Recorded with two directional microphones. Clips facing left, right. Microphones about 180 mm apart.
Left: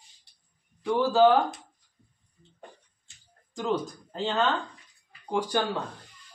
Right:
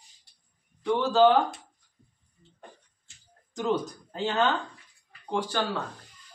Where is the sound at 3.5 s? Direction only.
Centre (ahead or behind).